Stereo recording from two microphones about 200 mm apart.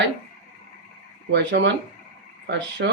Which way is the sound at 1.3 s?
60° right (ahead or behind).